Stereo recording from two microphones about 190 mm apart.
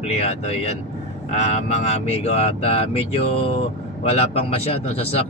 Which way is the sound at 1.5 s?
35° left (ahead or behind).